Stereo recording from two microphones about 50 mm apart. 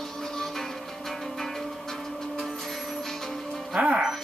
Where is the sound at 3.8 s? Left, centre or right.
Right.